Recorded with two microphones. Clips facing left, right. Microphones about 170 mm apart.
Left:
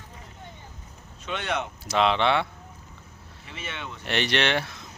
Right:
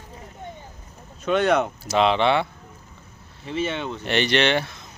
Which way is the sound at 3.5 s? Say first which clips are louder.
Right 12 dB; 30° right (ahead or behind).